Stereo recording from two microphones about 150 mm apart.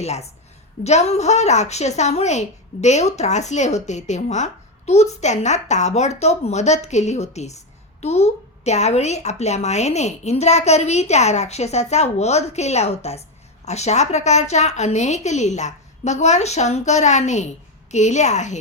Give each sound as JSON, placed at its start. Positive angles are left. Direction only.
{"t": 0.0, "sound": "a woman's voice", "side_deg": 45}